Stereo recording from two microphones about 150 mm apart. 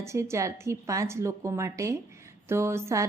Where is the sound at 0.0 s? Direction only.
20° right (ahead or behind).